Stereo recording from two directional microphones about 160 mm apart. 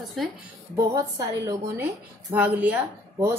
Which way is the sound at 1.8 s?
15° right (ahead or behind).